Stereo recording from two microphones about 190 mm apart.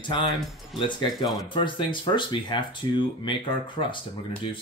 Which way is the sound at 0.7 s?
25° left (ahead or behind).